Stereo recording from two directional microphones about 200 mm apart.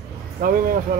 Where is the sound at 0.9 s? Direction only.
45° right (ahead or behind).